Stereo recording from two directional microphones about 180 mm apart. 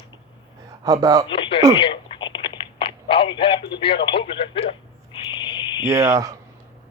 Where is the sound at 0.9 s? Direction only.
20° right (ahead or behind).